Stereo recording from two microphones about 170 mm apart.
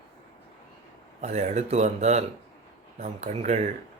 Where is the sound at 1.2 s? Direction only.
45° right (ahead or behind).